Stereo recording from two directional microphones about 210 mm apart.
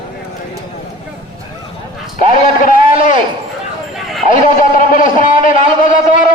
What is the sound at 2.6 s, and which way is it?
Speech, 40° left (ahead or behind).